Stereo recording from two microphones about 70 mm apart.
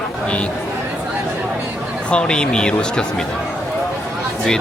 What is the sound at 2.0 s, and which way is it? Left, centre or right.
Speech, centre.